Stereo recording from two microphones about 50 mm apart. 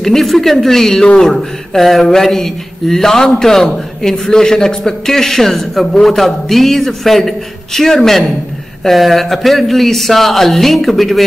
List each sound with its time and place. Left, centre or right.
0.0 s speech: centre